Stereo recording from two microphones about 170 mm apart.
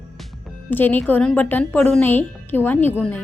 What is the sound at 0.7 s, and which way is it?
A woman's voice, 10° left (ahead or behind).